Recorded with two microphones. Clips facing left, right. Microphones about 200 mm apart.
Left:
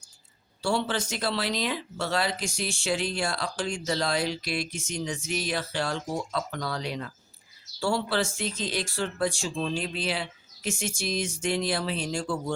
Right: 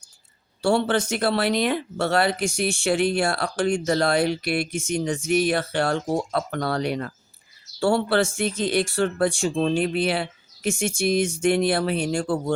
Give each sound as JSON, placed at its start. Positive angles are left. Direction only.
{"t": 0.6, "sound": "speech", "side_deg": -55}